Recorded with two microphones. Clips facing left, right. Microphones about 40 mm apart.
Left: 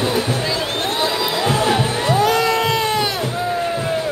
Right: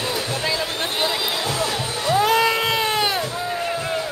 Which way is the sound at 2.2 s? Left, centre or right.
Centre.